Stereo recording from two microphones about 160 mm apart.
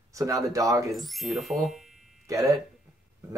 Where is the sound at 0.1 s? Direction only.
20° right (ahead or behind).